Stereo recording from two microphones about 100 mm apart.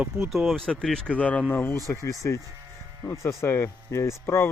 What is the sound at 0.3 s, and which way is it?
Speech, centre (ahead or behind).